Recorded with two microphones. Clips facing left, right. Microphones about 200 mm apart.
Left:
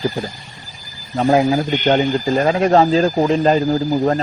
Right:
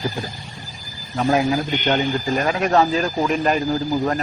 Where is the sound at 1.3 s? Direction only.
25° left (ahead or behind).